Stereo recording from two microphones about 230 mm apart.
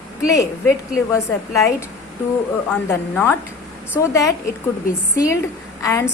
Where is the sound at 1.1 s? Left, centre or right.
Centre.